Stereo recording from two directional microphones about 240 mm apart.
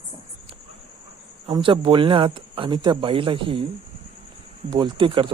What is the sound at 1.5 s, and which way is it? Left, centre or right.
Speech, right.